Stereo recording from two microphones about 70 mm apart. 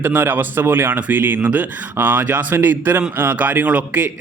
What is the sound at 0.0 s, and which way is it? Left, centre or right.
A man's voice, right.